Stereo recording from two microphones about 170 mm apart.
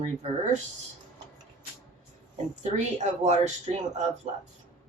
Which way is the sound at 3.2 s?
40° right (ahead or behind).